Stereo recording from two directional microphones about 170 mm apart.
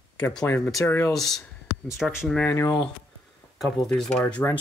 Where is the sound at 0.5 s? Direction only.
20° left (ahead or behind).